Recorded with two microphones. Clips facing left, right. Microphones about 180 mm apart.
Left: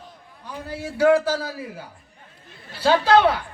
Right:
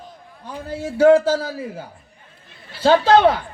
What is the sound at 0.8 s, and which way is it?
Speech, 50° right (ahead or behind).